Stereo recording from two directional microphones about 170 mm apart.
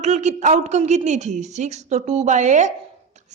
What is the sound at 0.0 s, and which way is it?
A woman's voice, 45° right (ahead or behind).